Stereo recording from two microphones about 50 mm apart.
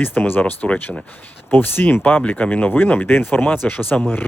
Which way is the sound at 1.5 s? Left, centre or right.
Left.